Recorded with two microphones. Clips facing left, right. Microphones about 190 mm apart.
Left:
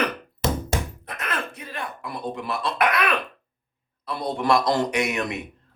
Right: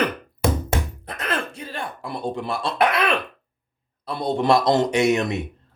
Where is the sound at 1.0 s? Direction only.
30° right (ahead or behind).